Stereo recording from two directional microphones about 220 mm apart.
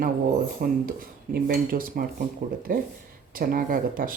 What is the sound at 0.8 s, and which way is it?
Speech, 45° right (ahead or behind).